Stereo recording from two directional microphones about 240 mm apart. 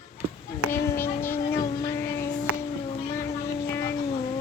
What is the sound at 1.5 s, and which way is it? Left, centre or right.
Music, centre.